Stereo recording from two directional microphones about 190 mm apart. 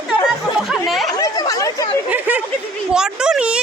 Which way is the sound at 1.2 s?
20° left (ahead or behind).